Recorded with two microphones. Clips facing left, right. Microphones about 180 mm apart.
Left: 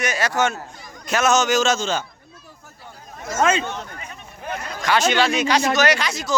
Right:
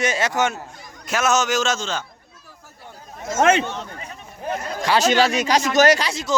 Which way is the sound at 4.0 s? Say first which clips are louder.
Right 2 dB; 35° right (ahead or behind).